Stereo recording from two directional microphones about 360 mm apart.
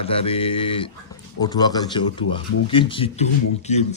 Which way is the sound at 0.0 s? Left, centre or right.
Centre.